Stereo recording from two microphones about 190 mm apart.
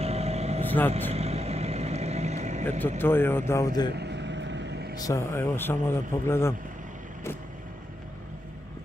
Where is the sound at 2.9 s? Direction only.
10° left (ahead or behind).